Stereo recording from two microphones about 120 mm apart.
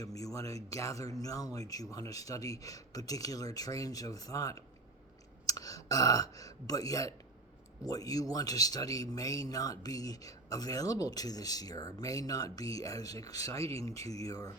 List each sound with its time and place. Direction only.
0.0 s a man's voice: 30° left (ahead or behind)